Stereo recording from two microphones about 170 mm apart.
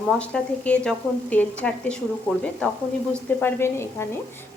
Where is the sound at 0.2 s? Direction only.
5° left (ahead or behind).